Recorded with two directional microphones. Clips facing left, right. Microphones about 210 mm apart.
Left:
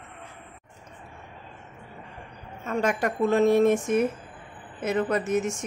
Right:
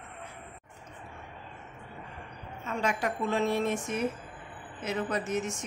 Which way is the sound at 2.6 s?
45° left (ahead or behind).